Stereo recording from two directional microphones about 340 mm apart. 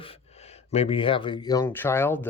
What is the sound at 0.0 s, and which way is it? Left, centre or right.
Speech, centre.